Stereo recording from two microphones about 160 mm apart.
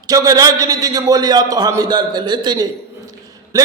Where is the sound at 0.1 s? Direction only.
20° right (ahead or behind).